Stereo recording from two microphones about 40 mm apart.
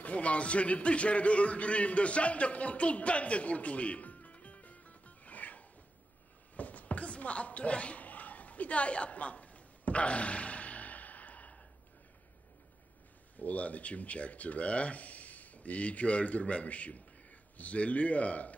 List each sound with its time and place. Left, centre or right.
0.0 s a man's voice: left
6.5 s a sound: left
13.4 s speech: left